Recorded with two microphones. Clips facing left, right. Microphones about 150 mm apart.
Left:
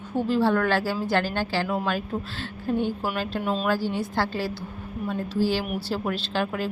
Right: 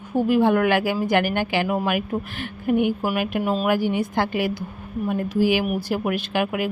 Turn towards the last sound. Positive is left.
turn(degrees=-15)  # may be behind; listen again after turning